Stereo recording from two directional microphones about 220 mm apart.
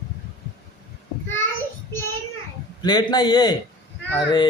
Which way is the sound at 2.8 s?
20° left (ahead or behind).